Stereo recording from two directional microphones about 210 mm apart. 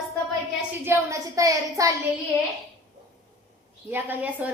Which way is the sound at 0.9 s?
15° right (ahead or behind).